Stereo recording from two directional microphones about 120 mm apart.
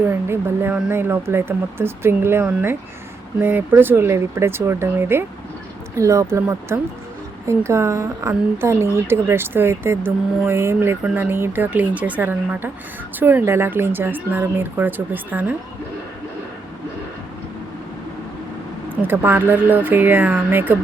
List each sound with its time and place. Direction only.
0.1 s a woman's voice: 20° right (ahead or behind)
18.9 s speech: 15° right (ahead or behind)